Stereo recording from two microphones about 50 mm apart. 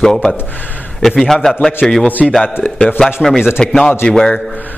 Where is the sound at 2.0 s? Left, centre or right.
Left.